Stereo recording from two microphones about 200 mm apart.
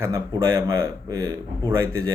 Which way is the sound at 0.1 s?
15° right (ahead or behind).